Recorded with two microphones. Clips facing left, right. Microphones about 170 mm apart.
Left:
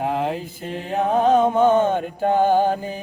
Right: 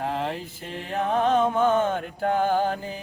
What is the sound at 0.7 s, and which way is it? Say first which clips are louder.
Music: left 5 dB; 35° left (ahead or behind).